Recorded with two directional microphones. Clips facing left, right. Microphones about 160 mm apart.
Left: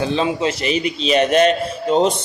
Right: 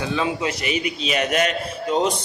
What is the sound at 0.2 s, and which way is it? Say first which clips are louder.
A man's voice: left 4 dB; 30° left (ahead or behind).